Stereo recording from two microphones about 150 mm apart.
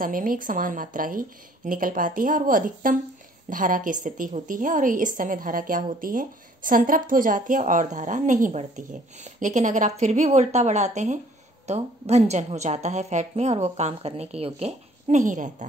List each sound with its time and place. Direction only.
0.0 s a woman's voice: 70° right (ahead or behind)